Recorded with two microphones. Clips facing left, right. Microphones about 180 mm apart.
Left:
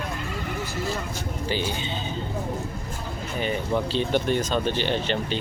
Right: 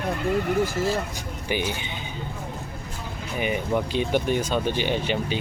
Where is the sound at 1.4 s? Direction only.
15° right (ahead or behind).